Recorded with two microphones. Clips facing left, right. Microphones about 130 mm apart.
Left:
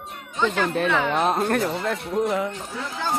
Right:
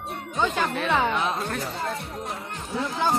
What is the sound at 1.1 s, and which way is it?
Speech, 45° left (ahead or behind).